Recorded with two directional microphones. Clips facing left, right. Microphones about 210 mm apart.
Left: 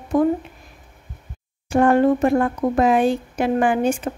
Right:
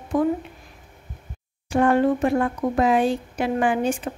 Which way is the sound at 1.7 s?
45° left (ahead or behind).